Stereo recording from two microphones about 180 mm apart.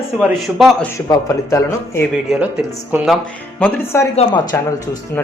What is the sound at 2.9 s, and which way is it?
Speech, centre (ahead or behind).